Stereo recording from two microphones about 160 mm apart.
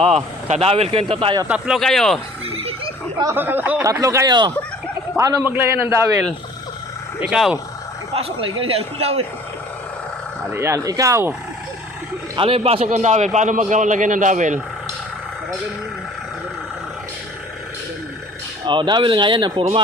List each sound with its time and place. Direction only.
0.4 s a man's voice: 40° right (ahead or behind)
1.5 s speech: 5° right (ahead or behind)
2.5 s a sound: 35° right (ahead or behind)
3.2 s speech: 15° right (ahead or behind)
5.5 s speech: 15° right (ahead or behind)
7.2 s speech: 5° right (ahead or behind)
8.1 s a man's voice: 35° right (ahead or behind)
10.5 s speech: 15° right (ahead or behind)
12.4 s a man's voice: 35° right (ahead or behind)
18.6 s speech: 30° right (ahead or behind)